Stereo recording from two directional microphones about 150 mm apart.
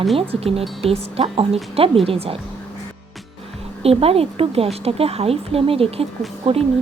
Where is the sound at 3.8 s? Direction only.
40° right (ahead or behind).